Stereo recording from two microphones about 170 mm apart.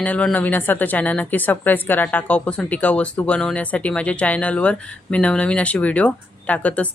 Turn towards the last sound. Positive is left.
turn(degrees=10)  # may be behind; listen again after turning